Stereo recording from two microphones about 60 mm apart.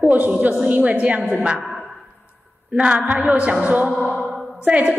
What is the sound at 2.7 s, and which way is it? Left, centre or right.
A woman's voice, centre.